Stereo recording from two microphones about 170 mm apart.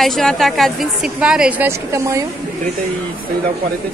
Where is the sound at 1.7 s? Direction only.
15° right (ahead or behind).